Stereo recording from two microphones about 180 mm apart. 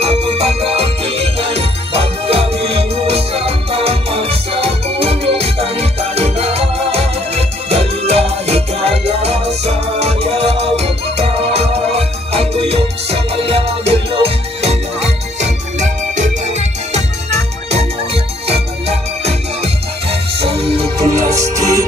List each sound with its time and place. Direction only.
0.0 s music: 35° right (ahead or behind)
17.6 s music: 35° right (ahead or behind)
21.0 s music: 15° right (ahead or behind)